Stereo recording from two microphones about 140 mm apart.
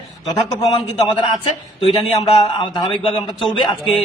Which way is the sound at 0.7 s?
35° left (ahead or behind).